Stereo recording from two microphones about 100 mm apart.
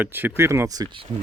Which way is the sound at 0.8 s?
55° right (ahead or behind).